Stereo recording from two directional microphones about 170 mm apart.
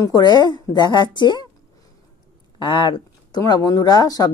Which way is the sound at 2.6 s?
30° left (ahead or behind).